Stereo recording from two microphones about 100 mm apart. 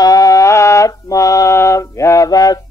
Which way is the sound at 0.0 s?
35° left (ahead or behind).